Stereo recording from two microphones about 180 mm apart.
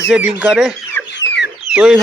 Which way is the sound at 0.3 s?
5° right (ahead or behind).